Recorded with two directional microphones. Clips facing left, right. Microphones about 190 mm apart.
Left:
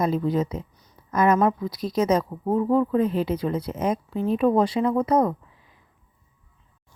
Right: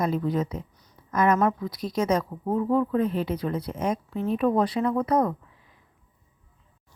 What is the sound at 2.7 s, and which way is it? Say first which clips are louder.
Speech: left 2 dB; 35° left (ahead or behind).